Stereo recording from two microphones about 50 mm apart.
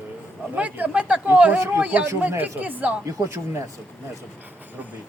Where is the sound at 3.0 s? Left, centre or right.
Right.